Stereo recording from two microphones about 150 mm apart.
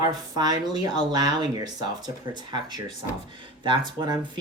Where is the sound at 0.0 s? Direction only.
25° right (ahead or behind).